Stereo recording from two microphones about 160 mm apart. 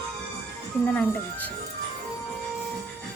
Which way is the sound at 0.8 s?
10° left (ahead or behind).